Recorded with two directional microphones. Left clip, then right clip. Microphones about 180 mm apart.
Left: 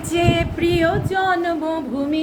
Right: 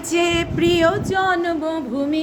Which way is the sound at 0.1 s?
50° right (ahead or behind).